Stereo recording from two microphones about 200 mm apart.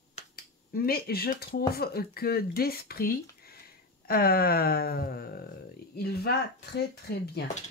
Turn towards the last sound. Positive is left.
turn(degrees=55)  # may be behind; listen again after turning